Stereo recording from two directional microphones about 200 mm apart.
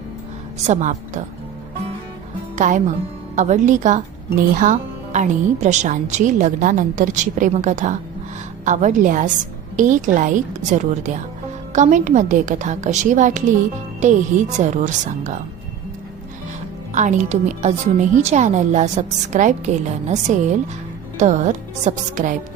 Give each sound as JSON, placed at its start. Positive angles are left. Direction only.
{"t": 0.7, "sound": "a woman's voice", "side_deg": -40}
{"t": 2.6, "sound": "a woman's voice", "side_deg": -40}
{"t": 16.9, "sound": "a woman's voice", "side_deg": -35}